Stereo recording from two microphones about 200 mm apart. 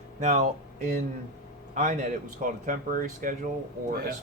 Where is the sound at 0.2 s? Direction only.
35° right (ahead or behind).